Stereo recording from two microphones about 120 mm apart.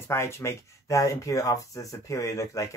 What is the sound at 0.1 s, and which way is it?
Speech, 25° left (ahead or behind).